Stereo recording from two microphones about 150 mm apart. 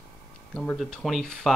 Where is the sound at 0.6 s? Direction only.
5° left (ahead or behind).